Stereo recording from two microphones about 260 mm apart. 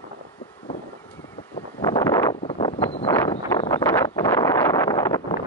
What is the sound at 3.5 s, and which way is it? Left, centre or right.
Wind noise, centre.